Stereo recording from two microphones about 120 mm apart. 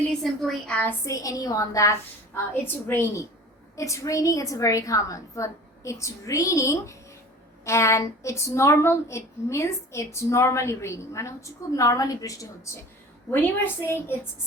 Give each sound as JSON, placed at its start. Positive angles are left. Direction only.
{"t": 0.2, "sound": "a woman's voice", "side_deg": 0}
{"t": 0.8, "sound": "a woman's voice", "side_deg": 15}
{"t": 1.1, "sound": "a woman's voice", "side_deg": 25}